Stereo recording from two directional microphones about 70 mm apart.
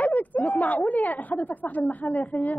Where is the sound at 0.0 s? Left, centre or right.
Left.